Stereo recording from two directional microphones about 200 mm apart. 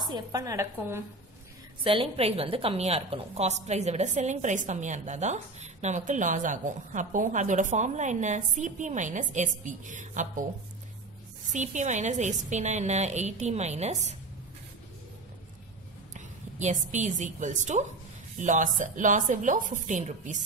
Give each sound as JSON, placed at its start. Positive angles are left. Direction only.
{"t": 0.1, "sound": "a woman's voice", "side_deg": -15}
{"t": 1.8, "sound": "a woman's voice", "side_deg": -25}
{"t": 11.5, "sound": "a woman's voice", "side_deg": -35}
{"t": 16.1, "sound": "a woman's voice", "side_deg": -35}